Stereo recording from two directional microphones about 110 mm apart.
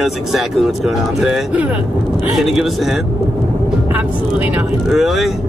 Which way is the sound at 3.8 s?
15° right (ahead or behind).